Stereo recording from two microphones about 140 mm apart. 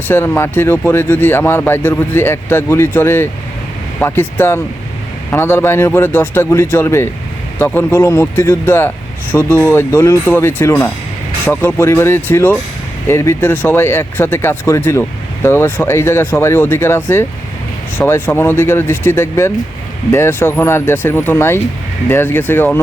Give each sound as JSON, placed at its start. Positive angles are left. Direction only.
{"t": 0.1, "sound": "speech", "side_deg": 15}